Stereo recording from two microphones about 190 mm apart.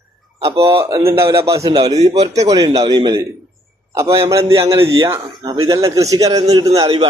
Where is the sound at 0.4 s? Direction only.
15° right (ahead or behind).